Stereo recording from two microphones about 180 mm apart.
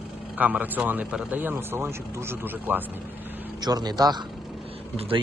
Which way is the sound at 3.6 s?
20° right (ahead or behind).